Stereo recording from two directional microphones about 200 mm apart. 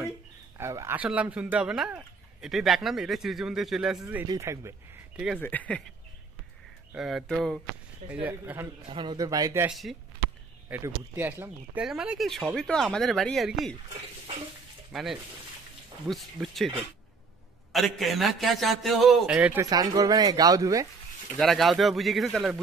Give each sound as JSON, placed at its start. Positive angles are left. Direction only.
{"t": 0.6, "sound": "speech", "side_deg": -15}
{"t": 4.0, "sound": "speech", "side_deg": -15}
{"t": 5.4, "sound": "speech", "side_deg": 10}
{"t": 6.9, "sound": "speech", "side_deg": 0}
{"t": 8.9, "sound": "a man's voice", "side_deg": -20}
{"t": 9.7, "sound": "speech", "side_deg": 0}
{"t": 14.9, "sound": "speech", "side_deg": 0}
{"t": 17.7, "sound": "speech", "side_deg": 0}
{"t": 21.4, "sound": "speech", "side_deg": 0}